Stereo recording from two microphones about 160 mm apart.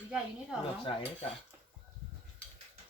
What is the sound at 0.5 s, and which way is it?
Speech, 5° right (ahead or behind).